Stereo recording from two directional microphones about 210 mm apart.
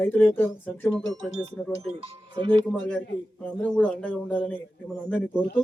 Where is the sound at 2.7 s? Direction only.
5° left (ahead or behind).